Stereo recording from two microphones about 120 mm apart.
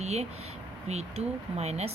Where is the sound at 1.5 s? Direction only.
65° right (ahead or behind).